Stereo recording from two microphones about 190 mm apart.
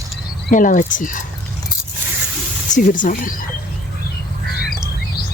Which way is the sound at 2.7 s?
40° left (ahead or behind).